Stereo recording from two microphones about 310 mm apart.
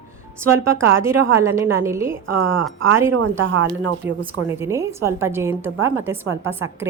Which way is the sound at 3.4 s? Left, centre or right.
Right.